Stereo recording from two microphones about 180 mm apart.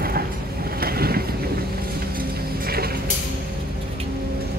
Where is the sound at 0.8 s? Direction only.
60° right (ahead or behind).